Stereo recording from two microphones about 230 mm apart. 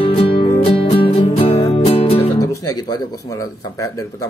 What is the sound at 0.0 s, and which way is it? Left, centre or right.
Music, left.